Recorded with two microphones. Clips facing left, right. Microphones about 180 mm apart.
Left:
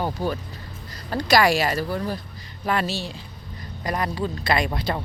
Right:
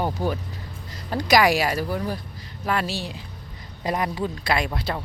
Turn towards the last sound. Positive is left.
turn(degrees=-5)  # may be behind; listen again after turning